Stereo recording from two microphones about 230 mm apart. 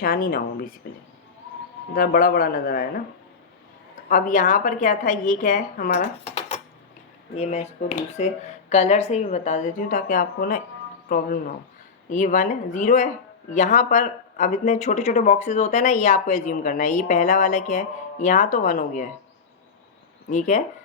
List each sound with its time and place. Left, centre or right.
0.0 s speech: left
2.0 s speech: left
4.1 s speech: left